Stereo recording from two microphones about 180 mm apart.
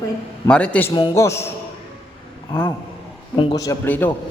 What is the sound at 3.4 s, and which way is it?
Speech, 25° left (ahead or behind).